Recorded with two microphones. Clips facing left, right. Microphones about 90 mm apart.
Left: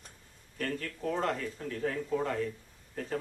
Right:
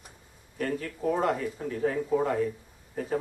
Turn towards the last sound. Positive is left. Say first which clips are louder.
# right 5 dB
turn(degrees=-15)  # may be behind; listen again after turning